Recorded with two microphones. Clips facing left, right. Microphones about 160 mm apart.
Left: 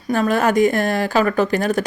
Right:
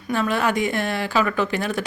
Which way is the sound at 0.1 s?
45° left (ahead or behind).